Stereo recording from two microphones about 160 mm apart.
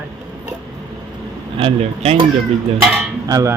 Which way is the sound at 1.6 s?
35° right (ahead or behind).